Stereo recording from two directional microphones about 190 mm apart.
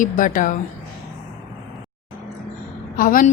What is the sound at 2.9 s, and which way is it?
Speech, 45° left (ahead or behind).